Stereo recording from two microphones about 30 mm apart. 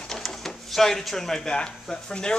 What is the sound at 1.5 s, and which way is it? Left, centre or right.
Speech, left.